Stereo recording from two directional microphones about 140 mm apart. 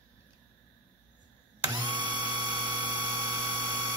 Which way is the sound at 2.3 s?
30° right (ahead or behind).